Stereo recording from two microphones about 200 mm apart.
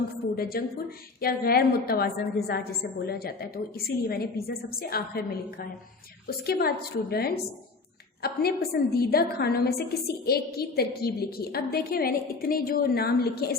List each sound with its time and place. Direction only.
0.3 s a woman's voice: 50° left (ahead or behind)